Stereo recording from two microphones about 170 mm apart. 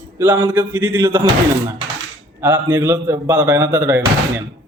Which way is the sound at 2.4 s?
10° right (ahead or behind).